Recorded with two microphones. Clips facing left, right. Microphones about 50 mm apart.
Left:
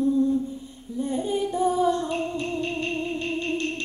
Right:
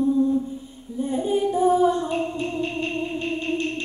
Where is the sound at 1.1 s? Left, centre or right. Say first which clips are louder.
Right 4 dB; centre.